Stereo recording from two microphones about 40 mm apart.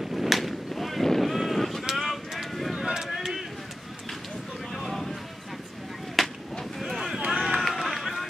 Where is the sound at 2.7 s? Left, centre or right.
Centre.